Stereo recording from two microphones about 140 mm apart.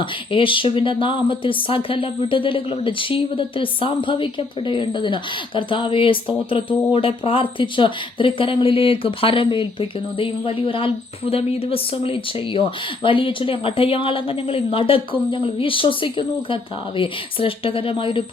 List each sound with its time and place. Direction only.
0.0 s speech: 40° left (ahead or behind)